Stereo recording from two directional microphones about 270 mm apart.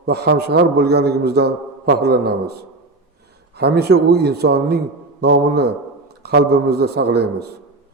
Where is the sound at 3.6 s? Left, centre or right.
Right.